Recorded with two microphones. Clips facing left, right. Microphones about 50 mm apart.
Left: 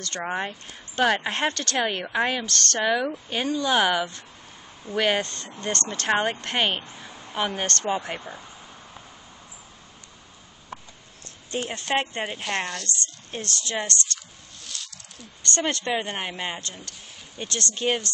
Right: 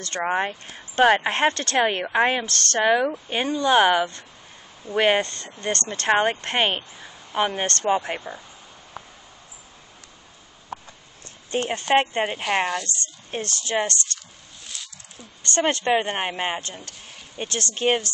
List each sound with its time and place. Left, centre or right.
0.2 s speech: right
2.4 s speech: centre
2.8 s speech: centre
5.2 s speech: centre
6.0 s speech: right
11.7 s speech: centre
14.7 s snake: centre
15.6 s speech: right